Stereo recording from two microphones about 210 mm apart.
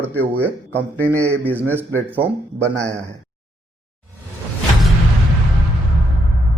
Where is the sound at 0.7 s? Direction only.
10° left (ahead or behind).